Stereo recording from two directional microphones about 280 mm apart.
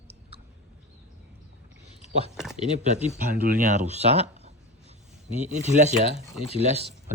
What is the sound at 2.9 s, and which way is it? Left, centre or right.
Speech, right.